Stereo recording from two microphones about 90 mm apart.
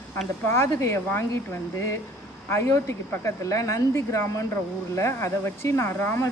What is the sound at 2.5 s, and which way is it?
Speech, 30° left (ahead or behind).